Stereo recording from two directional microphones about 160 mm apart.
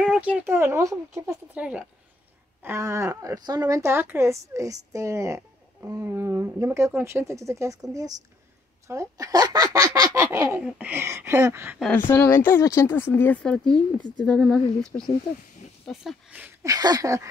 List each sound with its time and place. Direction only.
0.0 s a woman's voice: 5° right (ahead or behind)
8.8 s a woman's voice: 20° right (ahead or behind)
12.3 s a woman's voice: 15° left (ahead or behind); by 17.3 s 20° right (ahead or behind)